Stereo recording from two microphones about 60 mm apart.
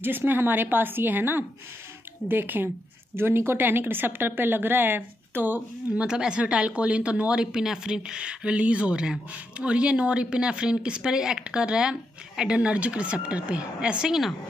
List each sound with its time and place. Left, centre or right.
0.0 s speech: right
5.9 s speech: centre